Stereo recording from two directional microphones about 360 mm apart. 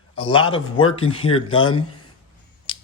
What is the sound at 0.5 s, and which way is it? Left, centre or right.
Speech, centre.